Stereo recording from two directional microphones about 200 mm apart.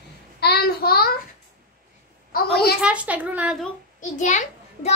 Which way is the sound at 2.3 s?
50° left (ahead or behind).